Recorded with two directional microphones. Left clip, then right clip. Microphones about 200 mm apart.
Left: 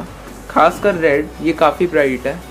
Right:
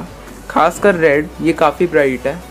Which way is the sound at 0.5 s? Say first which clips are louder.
Right 1 dB; 25° right (ahead or behind).